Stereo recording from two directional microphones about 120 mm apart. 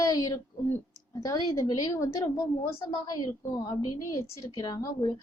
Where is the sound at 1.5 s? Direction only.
30° left (ahead or behind).